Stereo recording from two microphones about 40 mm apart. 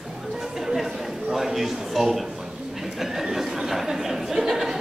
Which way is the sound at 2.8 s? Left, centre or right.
Centre.